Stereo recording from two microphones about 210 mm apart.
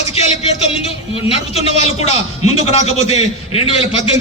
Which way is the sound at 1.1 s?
30° left (ahead or behind).